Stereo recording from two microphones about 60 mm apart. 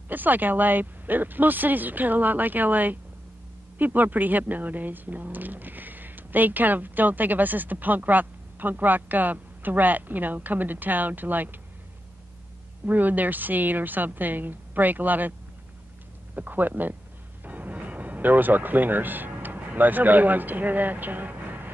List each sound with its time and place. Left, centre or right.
0.1 s speech: right
12.8 s speech: right
16.3 s speech: right